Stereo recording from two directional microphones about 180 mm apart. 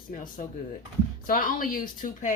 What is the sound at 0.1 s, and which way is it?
A woman's voice, 45° left (ahead or behind).